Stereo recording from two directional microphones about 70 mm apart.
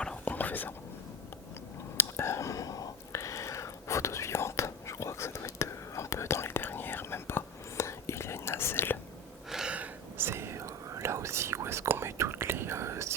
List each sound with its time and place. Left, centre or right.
0.3 s whispering: left
2.0 s whispering: left
9.5 s gasp: centre
10.2 s whispering: right